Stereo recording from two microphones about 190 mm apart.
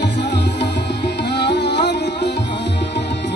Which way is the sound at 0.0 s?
65° left (ahead or behind).